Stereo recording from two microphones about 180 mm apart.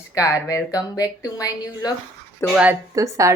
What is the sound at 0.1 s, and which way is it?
A woman's voice, 20° left (ahead or behind).